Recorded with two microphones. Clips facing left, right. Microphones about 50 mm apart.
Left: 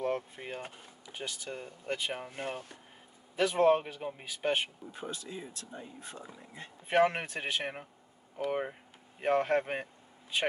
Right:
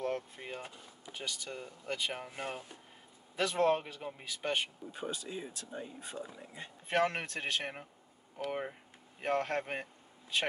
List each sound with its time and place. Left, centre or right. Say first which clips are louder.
0.0 s a sound: left 3 dB; centre
1.1 s speech: left 2 dB; centre
4.9 s speech: right 2 dB; centre
6.9 s speech: left 4 dB; centre